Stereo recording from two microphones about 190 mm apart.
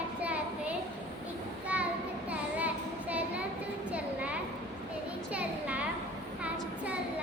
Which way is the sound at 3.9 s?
5° right (ahead or behind).